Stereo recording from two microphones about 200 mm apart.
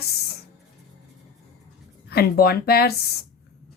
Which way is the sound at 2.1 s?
50° left (ahead or behind).